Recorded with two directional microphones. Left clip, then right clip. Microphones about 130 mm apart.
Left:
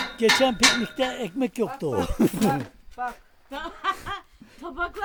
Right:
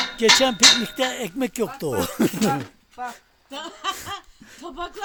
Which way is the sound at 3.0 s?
55° left (ahead or behind).